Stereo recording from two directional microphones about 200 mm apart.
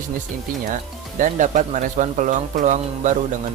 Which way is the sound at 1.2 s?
40° right (ahead or behind).